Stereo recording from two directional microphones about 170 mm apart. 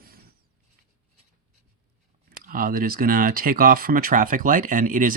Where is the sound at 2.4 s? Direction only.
55° right (ahead or behind).